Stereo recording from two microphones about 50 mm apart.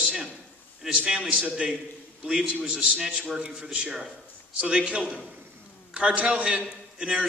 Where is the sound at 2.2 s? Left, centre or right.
Centre.